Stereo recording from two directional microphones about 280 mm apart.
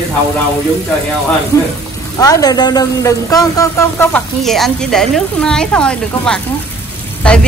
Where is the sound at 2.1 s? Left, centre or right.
Centre.